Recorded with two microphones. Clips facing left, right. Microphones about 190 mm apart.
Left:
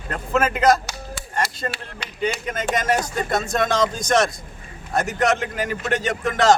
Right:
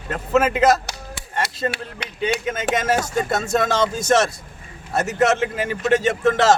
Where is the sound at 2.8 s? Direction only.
5° right (ahead or behind).